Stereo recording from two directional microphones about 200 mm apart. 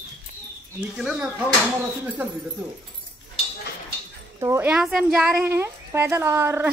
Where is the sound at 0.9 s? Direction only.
5° right (ahead or behind).